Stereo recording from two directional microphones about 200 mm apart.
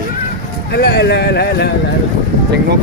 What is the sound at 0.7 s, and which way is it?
Speech, 55° left (ahead or behind).